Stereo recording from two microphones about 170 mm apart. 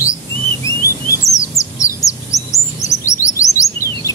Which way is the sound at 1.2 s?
20° left (ahead or behind).